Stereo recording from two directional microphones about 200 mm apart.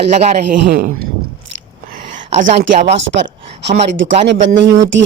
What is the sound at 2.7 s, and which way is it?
Speech, 35° right (ahead or behind).